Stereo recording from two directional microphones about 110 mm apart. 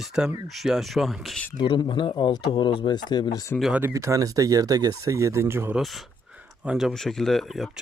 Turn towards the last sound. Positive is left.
turn(degrees=0)  # may be behind; listen again after turning